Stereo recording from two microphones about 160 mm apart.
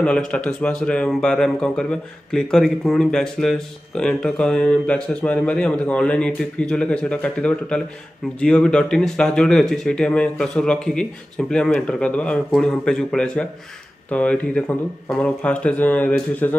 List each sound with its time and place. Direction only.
0.0 s a man's voice: 5° left (ahead or behind)